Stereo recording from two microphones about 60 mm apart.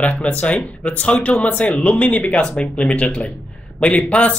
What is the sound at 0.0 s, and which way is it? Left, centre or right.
Speech, left.